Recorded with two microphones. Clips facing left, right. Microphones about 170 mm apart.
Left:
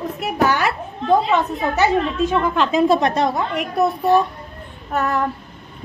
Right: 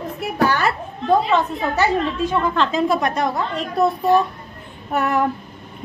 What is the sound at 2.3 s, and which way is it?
A woman's voice, 20° left (ahead or behind).